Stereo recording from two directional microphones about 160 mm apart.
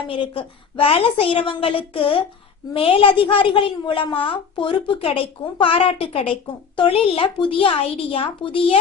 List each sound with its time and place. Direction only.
0.1 s a woman's voice: 35° left (ahead or behind)